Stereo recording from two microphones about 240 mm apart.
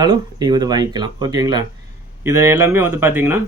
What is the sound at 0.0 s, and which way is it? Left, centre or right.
Speech, centre.